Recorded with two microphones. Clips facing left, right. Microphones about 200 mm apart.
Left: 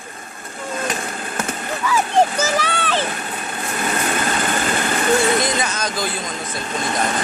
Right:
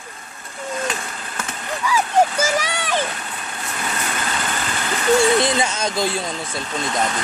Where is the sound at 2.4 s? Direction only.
10° right (ahead or behind).